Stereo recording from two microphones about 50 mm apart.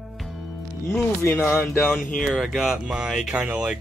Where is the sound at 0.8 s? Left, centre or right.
Left.